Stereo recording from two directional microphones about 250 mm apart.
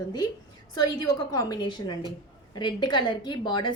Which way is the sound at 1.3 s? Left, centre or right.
Centre.